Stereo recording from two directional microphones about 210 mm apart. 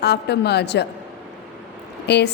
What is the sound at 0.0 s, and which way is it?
Speech, 55° left (ahead or behind).